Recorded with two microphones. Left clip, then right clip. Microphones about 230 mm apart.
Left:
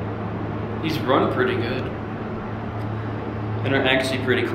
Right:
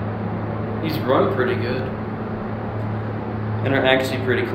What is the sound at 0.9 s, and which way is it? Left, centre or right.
Speech, centre.